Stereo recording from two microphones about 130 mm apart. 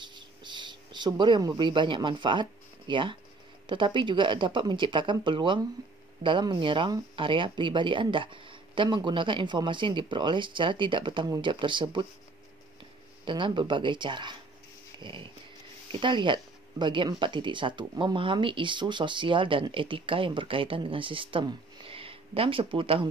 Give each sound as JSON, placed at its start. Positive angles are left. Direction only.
{"t": 0.0, "sound": "a sound", "side_deg": -35}
{"t": 1.6, "sound": "speech", "side_deg": -40}
{"t": 13.2, "sound": "speech", "side_deg": -40}